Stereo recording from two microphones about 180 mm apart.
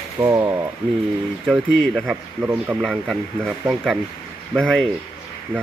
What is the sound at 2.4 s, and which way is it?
Speech, 10° right (ahead or behind).